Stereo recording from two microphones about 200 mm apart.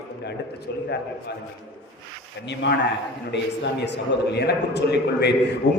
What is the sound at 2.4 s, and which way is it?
Speech, 60° left (ahead or behind).